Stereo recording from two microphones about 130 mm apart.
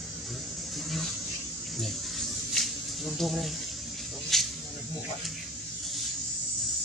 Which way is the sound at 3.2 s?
Centre (ahead or behind).